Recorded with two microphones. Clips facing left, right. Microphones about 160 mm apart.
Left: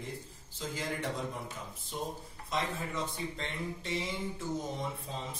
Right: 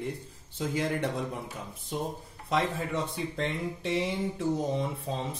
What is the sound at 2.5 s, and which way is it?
Speech, 70° right (ahead or behind).